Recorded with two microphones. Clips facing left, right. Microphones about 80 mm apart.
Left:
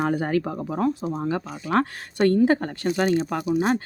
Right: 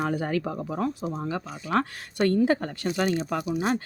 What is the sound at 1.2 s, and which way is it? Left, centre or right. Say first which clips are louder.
Speech: left 4 dB; left.